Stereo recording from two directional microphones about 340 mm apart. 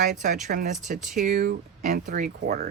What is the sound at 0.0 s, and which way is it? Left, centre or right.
Speech, right.